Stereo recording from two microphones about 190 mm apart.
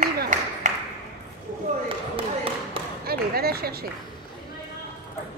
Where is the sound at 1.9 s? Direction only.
30° right (ahead or behind).